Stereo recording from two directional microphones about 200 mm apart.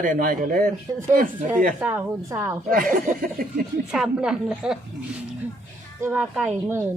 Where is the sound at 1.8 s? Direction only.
10° right (ahead or behind).